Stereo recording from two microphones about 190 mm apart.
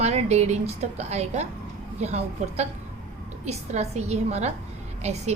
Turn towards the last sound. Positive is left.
turn(degrees=-35)  # may be behind; listen again after turning